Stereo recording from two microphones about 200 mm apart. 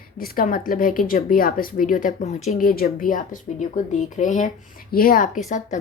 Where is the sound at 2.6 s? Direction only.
50° left (ahead or behind).